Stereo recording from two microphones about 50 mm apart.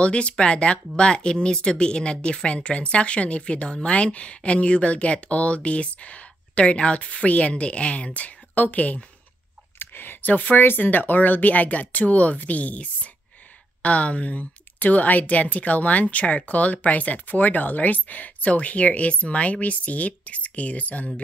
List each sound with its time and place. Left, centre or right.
0.0 s speech: left
9.8 s speech: left